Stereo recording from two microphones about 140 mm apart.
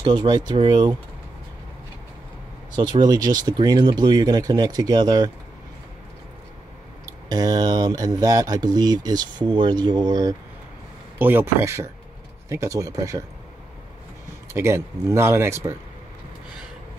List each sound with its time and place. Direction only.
0.0 s speech: 30° right (ahead or behind)
2.7 s speech: 30° right (ahead or behind)
7.1 s speech: 30° right (ahead or behind)
11.1 s speech: 15° right (ahead or behind)
14.5 s speech: 20° right (ahead or behind)